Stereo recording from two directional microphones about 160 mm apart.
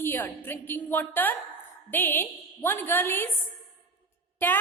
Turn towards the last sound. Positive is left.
turn(degrees=10)  # may be behind; listen again after turning